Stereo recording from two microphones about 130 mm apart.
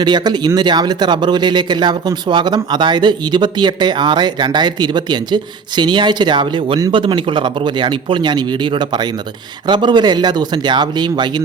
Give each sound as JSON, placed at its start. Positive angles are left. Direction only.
{"t": 0.0, "sound": "speech", "side_deg": -35}